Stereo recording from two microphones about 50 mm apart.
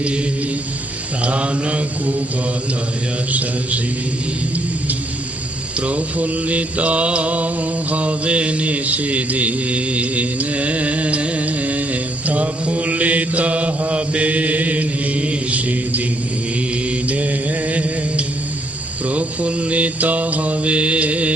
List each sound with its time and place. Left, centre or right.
1.2 s mantra: right
5.8 s mantra: right
17.1 s music: right
19.0 s mantra: right